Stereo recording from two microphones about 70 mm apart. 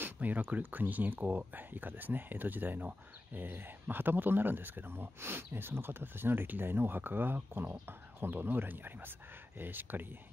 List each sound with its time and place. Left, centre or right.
0.0 s speech: right